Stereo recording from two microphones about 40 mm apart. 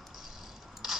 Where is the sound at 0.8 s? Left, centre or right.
Centre.